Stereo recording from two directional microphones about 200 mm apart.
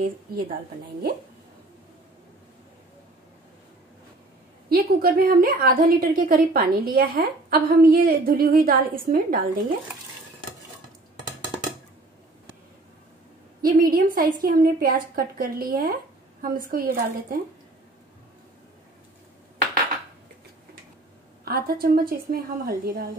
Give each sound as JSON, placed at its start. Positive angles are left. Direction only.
{"t": 0.0, "sound": "a woman's voice", "side_deg": -45}
{"t": 4.6, "sound": "a woman's voice", "side_deg": -50}
{"t": 13.6, "sound": "a woman's voice", "side_deg": -45}
{"t": 21.5, "sound": "a woman's voice", "side_deg": -50}